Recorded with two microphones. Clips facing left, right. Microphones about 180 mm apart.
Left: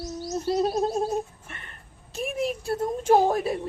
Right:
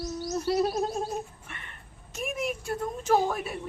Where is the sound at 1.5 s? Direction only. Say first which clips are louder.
Left 1 dB; 40° left (ahead or behind).